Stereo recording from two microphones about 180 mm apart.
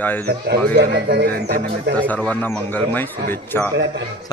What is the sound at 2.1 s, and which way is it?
Speech, 5° left (ahead or behind).